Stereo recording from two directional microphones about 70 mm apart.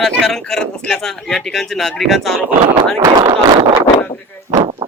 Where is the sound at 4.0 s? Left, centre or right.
Left.